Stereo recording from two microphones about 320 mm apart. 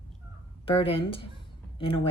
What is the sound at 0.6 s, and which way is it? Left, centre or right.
Speech, centre.